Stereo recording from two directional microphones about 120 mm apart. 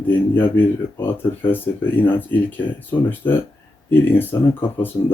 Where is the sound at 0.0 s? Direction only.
15° left (ahead or behind).